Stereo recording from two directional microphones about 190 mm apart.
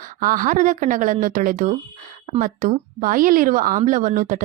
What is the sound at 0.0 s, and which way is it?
A woman's voice, 45° right (ahead or behind).